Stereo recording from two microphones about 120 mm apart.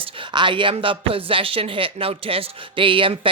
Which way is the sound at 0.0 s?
40° right (ahead or behind).